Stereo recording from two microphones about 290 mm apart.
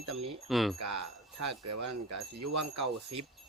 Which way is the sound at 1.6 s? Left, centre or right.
Right.